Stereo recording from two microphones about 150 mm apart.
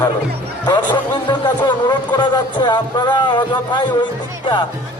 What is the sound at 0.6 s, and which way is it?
A man's voice, 30° left (ahead or behind).